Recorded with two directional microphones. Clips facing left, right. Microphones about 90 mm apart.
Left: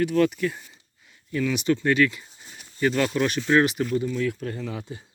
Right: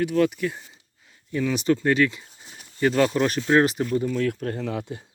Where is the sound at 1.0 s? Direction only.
30° right (ahead or behind); by 5.0 s 60° right (ahead or behind).